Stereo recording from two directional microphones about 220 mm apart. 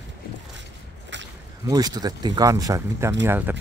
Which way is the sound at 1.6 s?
15° right (ahead or behind).